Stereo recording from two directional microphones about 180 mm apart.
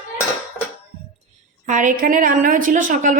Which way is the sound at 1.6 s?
45° right (ahead or behind).